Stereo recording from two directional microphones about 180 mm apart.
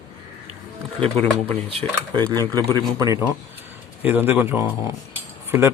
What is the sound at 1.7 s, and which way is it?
Speech, 35° right (ahead or behind).